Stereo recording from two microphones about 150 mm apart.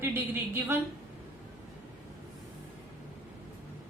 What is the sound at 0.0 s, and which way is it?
Speech, 15° right (ahead or behind).